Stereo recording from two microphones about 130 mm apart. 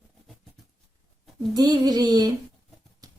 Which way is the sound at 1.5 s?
30° right (ahead or behind).